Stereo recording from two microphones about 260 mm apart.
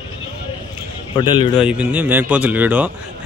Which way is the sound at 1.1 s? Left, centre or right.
Centre.